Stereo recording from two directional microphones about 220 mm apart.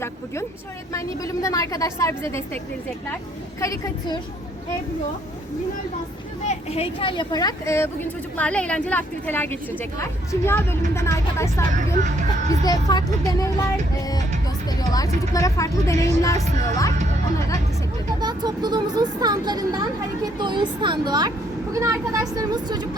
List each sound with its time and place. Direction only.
0.9 s speech: 15° left (ahead or behind)
3.6 s speech: 15° left (ahead or behind)
6.5 s speech: 30° left (ahead or behind)
14.8 s speech: 15° left (ahead or behind)
18.2 s speech: 20° right (ahead or behind)